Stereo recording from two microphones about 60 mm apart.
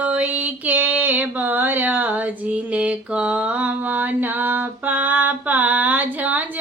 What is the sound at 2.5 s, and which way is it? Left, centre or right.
Mantra, right.